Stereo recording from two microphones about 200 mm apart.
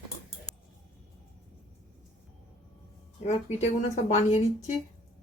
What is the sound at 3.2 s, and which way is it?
Speech, 35° left (ahead or behind).